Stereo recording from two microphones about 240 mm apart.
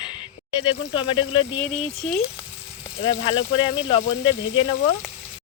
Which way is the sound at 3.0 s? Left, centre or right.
Left.